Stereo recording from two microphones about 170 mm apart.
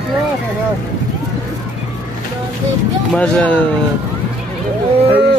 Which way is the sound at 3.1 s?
10° left (ahead or behind).